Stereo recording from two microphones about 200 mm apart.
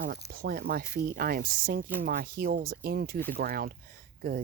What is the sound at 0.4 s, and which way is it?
Speech, 50° right (ahead or behind).